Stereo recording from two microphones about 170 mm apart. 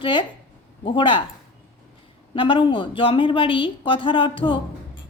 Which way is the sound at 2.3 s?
30° left (ahead or behind).